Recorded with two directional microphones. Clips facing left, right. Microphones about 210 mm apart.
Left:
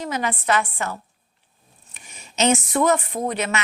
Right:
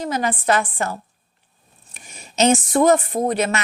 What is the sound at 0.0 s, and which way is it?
A woman's voice, 40° right (ahead or behind).